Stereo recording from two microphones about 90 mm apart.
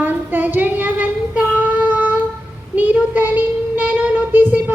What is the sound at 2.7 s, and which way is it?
Child singing, 20° right (ahead or behind).